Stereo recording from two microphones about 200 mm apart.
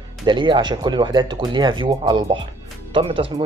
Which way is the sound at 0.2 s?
25° right (ahead or behind).